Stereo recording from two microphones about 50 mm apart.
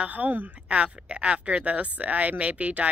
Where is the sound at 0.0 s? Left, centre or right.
Right.